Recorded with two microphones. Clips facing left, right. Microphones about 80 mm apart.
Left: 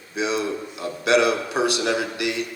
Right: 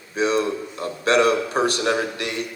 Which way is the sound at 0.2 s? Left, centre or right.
Right.